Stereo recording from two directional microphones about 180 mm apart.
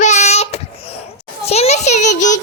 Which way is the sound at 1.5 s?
35° left (ahead or behind).